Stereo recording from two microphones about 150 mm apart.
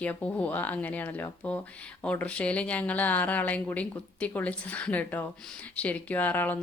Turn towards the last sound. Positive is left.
turn(degrees=10)  # may be behind; listen again after turning